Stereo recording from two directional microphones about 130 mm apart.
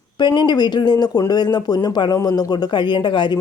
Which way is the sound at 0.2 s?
35° left (ahead or behind).